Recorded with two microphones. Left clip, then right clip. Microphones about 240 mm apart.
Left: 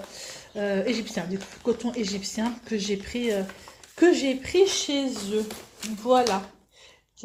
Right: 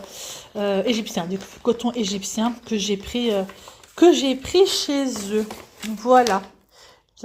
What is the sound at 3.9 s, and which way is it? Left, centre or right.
Speech, right.